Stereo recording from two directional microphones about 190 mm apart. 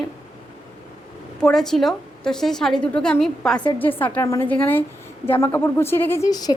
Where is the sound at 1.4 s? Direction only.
Centre (ahead or behind).